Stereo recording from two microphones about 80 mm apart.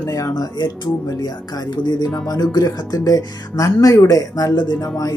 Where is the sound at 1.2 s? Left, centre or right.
Left.